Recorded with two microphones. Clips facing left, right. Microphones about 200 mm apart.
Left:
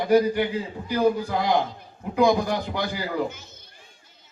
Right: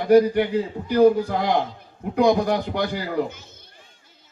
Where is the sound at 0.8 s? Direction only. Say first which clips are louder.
Right 6 dB; 55° right (ahead or behind).